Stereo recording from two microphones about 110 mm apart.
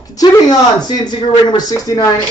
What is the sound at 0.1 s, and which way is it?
Speech, 35° left (ahead or behind).